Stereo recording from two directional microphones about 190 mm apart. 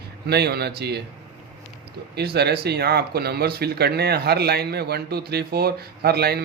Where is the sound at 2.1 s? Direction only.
60° right (ahead or behind).